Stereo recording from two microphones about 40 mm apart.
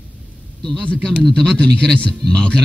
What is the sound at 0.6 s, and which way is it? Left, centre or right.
A man's voice, centre.